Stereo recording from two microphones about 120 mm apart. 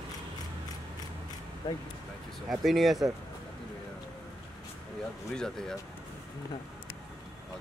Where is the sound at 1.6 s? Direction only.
40° left (ahead or behind).